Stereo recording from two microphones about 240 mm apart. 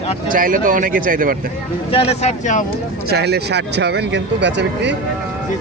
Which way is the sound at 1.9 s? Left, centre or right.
Left.